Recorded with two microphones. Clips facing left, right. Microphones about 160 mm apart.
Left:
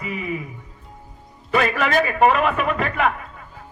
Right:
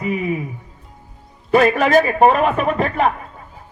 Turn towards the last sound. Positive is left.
turn(degrees=-35)  # may be behind; listen again after turning